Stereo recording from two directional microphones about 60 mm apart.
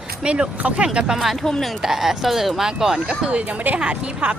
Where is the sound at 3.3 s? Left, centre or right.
Right.